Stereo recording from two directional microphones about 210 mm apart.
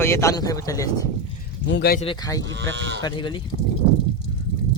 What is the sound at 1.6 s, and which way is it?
Speech, 55° left (ahead or behind).